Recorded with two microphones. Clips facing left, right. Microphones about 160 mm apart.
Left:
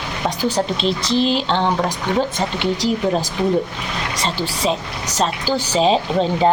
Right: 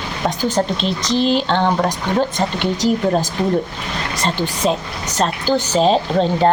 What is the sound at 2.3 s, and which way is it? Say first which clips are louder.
Speech: right 1 dB; 45° right (ahead or behind).